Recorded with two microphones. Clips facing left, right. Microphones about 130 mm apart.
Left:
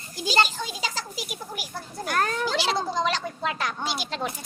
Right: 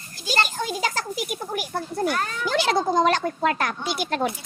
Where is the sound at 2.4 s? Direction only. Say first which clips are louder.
Right 4 dB; 55° right (ahead or behind).